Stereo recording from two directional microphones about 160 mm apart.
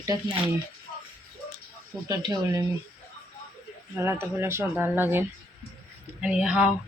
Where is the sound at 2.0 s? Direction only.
25° right (ahead or behind).